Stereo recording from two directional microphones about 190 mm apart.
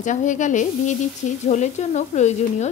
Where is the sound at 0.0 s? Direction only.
40° left (ahead or behind).